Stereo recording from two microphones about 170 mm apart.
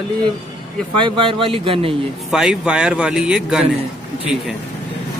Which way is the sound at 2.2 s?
5° right (ahead or behind).